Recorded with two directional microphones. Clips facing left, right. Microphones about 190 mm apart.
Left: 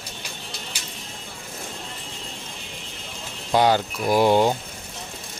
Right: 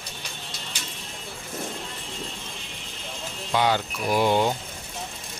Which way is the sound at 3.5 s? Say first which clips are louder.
Left 4 dB; 40° left (ahead or behind).